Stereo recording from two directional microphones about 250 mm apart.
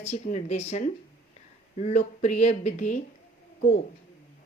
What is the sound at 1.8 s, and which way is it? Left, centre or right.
Speech, left.